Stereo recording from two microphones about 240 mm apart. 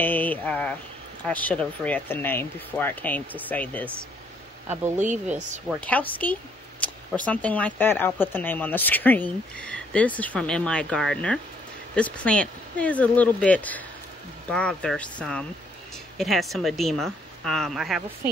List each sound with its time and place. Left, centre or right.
0.0 s a sound: centre
1.2 s speech: centre
4.9 s speech: right
5.9 s speech: centre